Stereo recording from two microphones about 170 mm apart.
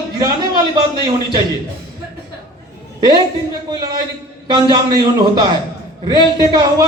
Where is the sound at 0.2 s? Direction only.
25° right (ahead or behind).